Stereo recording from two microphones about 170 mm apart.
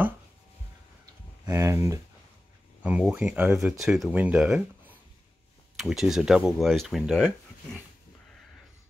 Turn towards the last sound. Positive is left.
turn(degrees=0)  # may be behind; listen again after turning